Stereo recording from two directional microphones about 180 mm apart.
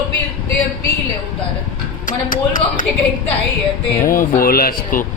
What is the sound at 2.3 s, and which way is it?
Speech, 50° left (ahead or behind).